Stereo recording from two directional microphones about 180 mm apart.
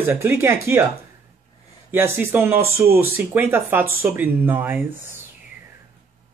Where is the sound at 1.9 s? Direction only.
10° right (ahead or behind).